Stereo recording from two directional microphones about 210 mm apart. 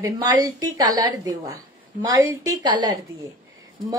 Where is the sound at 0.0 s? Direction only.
15° right (ahead or behind).